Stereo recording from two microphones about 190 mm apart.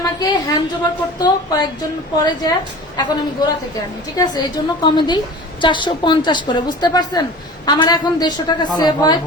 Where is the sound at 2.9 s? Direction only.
20° left (ahead or behind).